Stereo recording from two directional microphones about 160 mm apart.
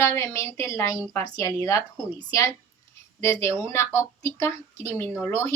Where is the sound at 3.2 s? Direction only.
15° left (ahead or behind).